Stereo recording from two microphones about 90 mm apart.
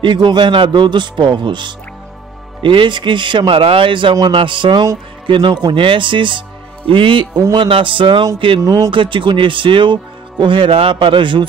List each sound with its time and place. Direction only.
0.0 s speech: 60° right (ahead or behind)
8.6 s speech: 45° right (ahead or behind)
8.9 s speech: 70° right (ahead or behind)